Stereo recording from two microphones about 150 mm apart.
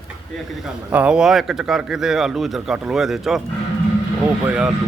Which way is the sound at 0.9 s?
5° right (ahead or behind).